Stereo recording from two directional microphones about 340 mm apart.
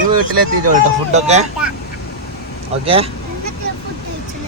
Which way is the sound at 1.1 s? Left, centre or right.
Centre.